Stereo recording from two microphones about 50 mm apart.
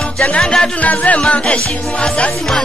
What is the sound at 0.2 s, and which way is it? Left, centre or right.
Music, centre.